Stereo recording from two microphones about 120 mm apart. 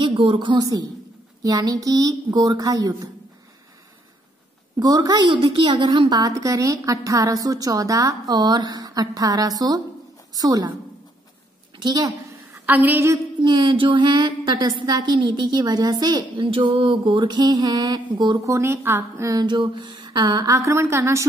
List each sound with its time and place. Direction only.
0.0 s a woman's voice: 45° right (ahead or behind)
4.7 s a woman's voice: 30° right (ahead or behind)
11.7 s a woman's voice: 40° right (ahead or behind)
12.6 s a woman's voice: 15° right (ahead or behind)
13.4 s a woman's voice: 40° right (ahead or behind)
18.4 s a woman's voice: 25° right (ahead or behind)
19.4 s a woman's voice: 40° right (ahead or behind); by 21.3 s 25° right (ahead or behind)